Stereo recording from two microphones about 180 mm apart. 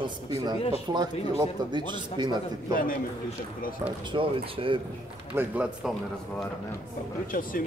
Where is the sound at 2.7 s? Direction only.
50° left (ahead or behind).